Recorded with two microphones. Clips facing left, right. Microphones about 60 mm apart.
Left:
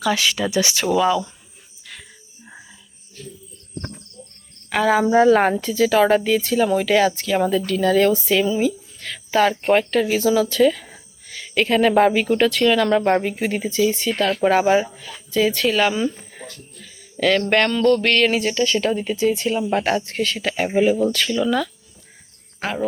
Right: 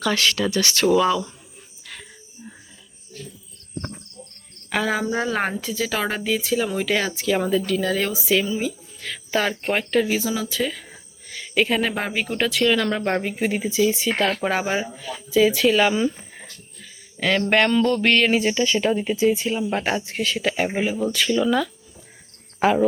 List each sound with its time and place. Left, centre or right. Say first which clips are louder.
0.0 s speech: left 1 dB; centre
1.8 s music: even; centre
4.7 s speech: left 6 dB; centre
19.7 s speech: left 4 dB; centre